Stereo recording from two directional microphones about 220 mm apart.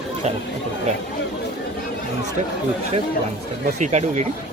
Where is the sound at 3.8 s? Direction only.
30° right (ahead or behind).